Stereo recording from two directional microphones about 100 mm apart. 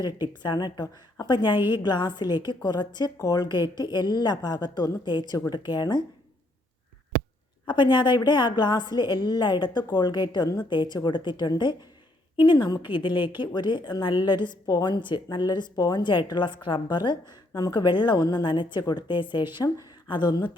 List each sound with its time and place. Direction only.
0.4 s a woman's voice: 45° left (ahead or behind)
1.5 s a woman's voice: 20° right (ahead or behind)
1.8 s a woman's voice: 45° left (ahead or behind)
7.6 s a woman's voice: 50° left (ahead or behind)